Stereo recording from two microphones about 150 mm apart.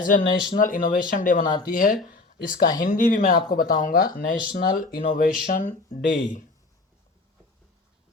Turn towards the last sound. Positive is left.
turn(degrees=60)  # may be behind; listen again after turning